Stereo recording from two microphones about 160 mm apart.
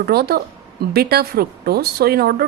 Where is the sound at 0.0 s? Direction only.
75° right (ahead or behind).